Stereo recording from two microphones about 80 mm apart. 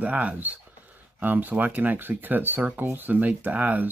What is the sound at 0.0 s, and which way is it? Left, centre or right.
Speech, centre.